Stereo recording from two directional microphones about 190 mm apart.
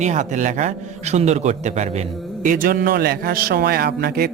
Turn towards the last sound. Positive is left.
turn(degrees=-55)  # may be behind; listen again after turning